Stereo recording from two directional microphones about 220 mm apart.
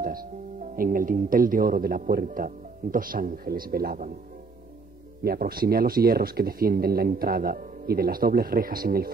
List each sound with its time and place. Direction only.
0.0 s speech: 40° right (ahead or behind)
5.2 s speech: 45° right (ahead or behind)